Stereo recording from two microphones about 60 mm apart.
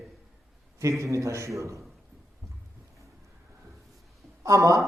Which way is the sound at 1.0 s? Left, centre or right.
Right.